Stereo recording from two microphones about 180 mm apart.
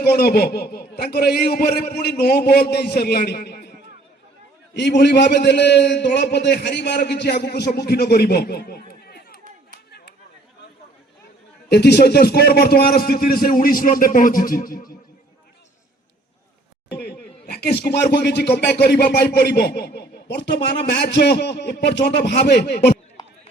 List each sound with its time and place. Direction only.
0.0 s a man's voice: 60° left (ahead or behind)
4.7 s a man's voice: 70° left (ahead or behind)
11.7 s a man's voice: 65° left (ahead or behind); by 14.9 s 50° left (ahead or behind)
17.0 s a man's voice: 60° left (ahead or behind)